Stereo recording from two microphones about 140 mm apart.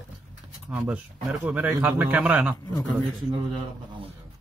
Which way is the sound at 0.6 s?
10° right (ahead or behind).